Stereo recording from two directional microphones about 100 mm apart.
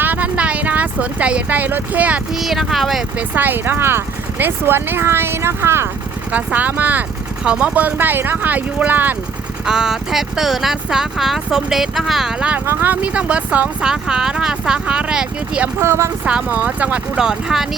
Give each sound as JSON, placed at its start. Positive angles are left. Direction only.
{"t": 0.0, "sound": "a sound", "side_deg": -15}
{"t": 2.3, "sound": "speech", "side_deg": 0}
{"t": 3.2, "sound": "speech", "side_deg": -20}
{"t": 9.6, "sound": "speech", "side_deg": -5}
{"t": 15.8, "sound": "speech", "side_deg": -30}
{"t": 16.2, "sound": "speech", "side_deg": -10}